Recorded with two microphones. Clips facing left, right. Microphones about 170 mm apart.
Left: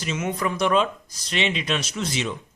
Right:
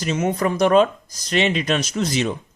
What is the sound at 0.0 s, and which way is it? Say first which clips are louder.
Speech: right 5 dB; 35° right (ahead or behind).